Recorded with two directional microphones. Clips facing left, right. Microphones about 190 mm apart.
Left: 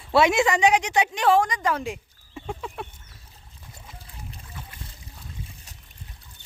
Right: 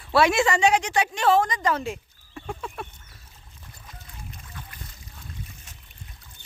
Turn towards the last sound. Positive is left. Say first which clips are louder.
# even
turn(degrees=35)  # may be behind; listen again after turning